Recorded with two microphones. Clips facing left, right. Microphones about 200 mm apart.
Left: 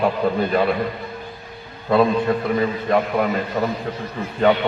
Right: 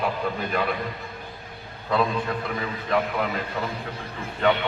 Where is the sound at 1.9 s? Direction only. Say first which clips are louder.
Left 8 dB; 45° left (ahead or behind).